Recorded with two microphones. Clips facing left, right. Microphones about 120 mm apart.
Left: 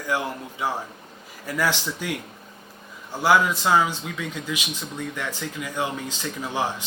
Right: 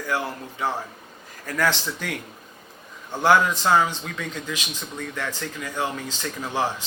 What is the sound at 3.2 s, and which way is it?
A man's voice, 10° left (ahead or behind).